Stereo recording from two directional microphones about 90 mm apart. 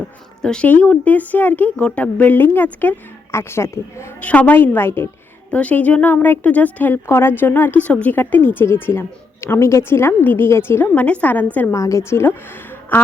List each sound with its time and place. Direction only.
0.4 s a woman's voice: 10° left (ahead or behind)
3.3 s a woman's voice: 30° left (ahead or behind)
4.2 s a woman's voice: 15° left (ahead or behind)
5.5 s a woman's voice: 15° left (ahead or behind)
11.7 s a woman's voice: 35° left (ahead or behind)